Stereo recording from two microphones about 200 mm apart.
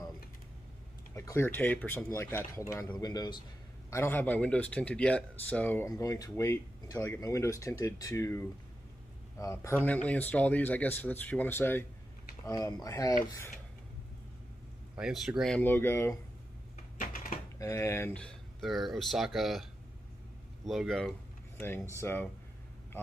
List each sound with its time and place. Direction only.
1.1 s speech: 15° left (ahead or behind)
15.0 s speech: centre (ahead or behind)
17.0 s typing: 45° left (ahead or behind)
17.6 s speech: 15° left (ahead or behind)